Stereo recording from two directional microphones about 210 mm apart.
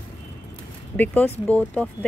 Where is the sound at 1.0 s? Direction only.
10° left (ahead or behind).